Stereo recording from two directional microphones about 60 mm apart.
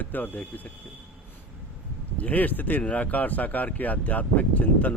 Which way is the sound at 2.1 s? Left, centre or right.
Left.